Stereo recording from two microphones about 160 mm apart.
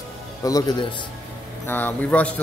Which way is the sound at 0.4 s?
25° left (ahead or behind).